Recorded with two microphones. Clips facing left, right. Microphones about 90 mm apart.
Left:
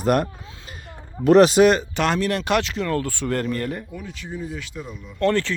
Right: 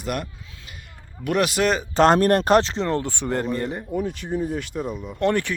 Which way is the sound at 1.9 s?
40° right (ahead or behind).